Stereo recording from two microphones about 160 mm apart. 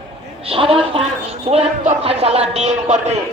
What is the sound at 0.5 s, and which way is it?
A man's voice, 35° right (ahead or behind).